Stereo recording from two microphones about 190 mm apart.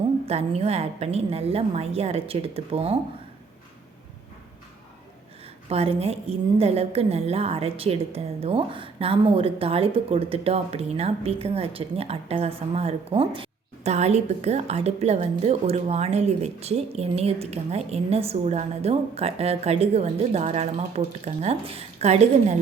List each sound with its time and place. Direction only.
0.3 s a woman's voice: 35° right (ahead or behind)
5.6 s a woman's voice: 30° right (ahead or behind)